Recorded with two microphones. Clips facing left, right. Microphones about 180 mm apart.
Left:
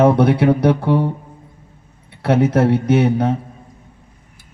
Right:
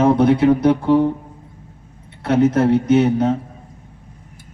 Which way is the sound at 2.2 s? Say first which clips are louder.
Even; 55° left (ahead or behind).